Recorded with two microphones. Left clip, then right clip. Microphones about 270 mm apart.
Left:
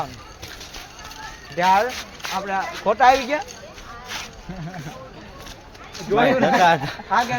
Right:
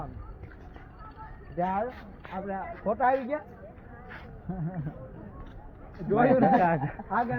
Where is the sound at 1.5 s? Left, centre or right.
Left.